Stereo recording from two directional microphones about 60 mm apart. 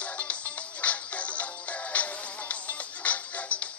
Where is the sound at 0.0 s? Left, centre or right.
Left.